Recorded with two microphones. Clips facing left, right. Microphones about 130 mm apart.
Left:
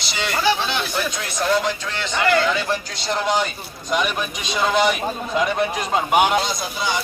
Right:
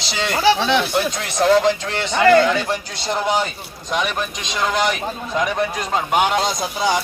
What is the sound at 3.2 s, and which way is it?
A man's voice, 5° right (ahead or behind).